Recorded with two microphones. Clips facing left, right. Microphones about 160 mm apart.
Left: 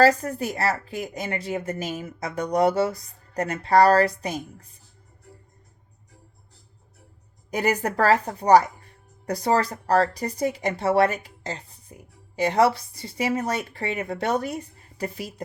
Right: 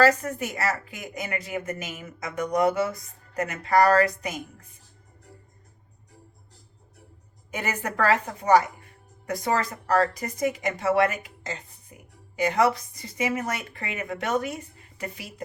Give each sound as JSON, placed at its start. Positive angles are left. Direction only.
{"t": 0.0, "sound": "speech", "side_deg": 30}
{"t": 7.5, "sound": "speech", "side_deg": 40}